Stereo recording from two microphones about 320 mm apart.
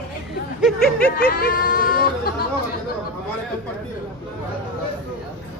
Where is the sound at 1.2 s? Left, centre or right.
Left.